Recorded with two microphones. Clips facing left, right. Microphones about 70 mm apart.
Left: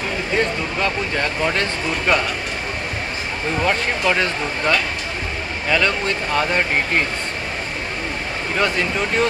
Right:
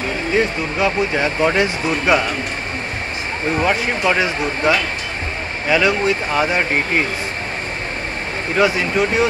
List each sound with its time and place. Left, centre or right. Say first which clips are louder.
0.4 s speech: right 3 dB; centre
3.5 s speech: right 2 dB; centre
8.5 s speech: right 4 dB; centre